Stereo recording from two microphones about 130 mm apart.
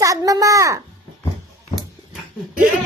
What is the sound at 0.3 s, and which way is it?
Speech, 25° right (ahead or behind).